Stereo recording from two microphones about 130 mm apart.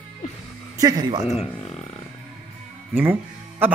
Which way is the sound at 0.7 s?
30° right (ahead or behind).